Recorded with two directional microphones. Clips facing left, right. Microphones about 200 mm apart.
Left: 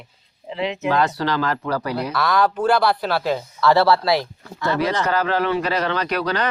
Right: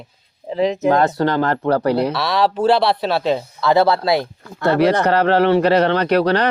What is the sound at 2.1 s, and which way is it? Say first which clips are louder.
Speech: right 1 dB; 30° right (ahead or behind).